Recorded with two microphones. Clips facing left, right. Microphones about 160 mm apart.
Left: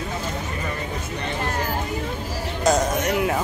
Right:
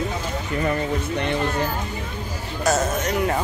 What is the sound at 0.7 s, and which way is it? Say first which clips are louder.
Music: right 6 dB; 60° right (ahead or behind).